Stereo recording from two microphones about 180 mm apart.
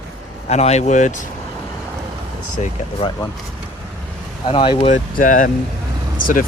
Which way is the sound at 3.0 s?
30° left (ahead or behind).